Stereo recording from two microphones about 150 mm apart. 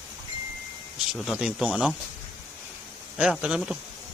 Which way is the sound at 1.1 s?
Centre (ahead or behind).